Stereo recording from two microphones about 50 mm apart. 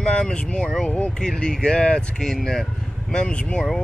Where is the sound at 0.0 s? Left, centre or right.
Centre.